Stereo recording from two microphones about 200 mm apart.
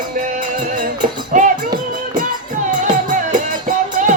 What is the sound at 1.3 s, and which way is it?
Music, 40° right (ahead or behind).